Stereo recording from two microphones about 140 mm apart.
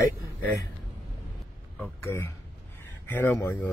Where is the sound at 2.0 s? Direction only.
15° left (ahead or behind).